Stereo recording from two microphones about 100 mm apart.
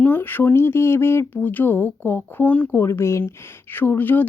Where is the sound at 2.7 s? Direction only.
25° left (ahead or behind).